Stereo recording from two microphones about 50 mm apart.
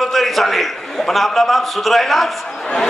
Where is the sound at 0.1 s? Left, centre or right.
Centre.